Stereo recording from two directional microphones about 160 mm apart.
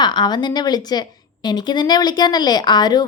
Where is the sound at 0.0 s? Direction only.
25° left (ahead or behind).